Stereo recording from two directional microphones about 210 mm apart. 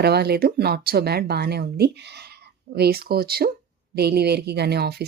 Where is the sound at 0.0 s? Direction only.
50° right (ahead or behind).